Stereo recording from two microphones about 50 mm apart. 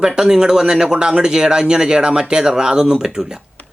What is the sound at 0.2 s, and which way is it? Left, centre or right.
Speech, centre.